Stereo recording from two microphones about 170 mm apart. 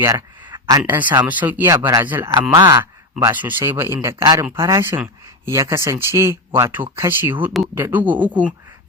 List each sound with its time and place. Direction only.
0.0 s speech: 20° right (ahead or behind)
1.2 s speech: 10° right (ahead or behind)
3.2 s speech: 10° right (ahead or behind)